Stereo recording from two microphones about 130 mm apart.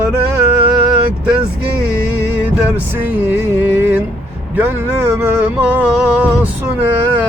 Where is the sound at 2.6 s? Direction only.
15° right (ahead or behind).